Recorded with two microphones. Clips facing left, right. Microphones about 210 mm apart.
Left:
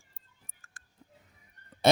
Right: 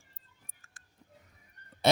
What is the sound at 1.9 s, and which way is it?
Speech, 45° left (ahead or behind).